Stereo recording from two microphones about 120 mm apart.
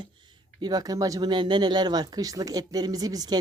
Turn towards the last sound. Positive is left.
turn(degrees=-35)  # may be behind; listen again after turning